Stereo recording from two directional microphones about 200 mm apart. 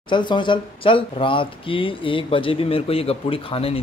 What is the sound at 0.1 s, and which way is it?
Speech, 25° left (ahead or behind).